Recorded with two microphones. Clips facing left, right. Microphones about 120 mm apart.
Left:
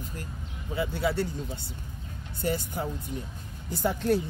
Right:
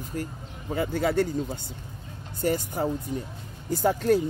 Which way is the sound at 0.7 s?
50° right (ahead or behind).